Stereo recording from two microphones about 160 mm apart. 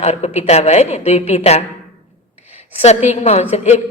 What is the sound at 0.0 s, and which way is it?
A woman's voice, 40° left (ahead or behind).